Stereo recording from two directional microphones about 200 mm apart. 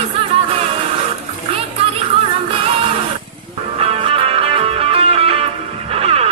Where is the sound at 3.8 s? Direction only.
30° right (ahead or behind).